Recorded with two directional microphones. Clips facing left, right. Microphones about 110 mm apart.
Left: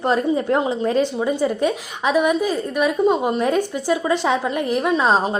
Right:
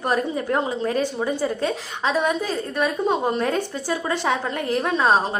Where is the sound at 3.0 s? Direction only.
5° left (ahead or behind).